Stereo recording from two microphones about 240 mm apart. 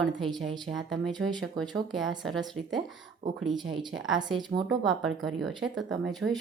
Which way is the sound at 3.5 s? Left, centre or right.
Centre.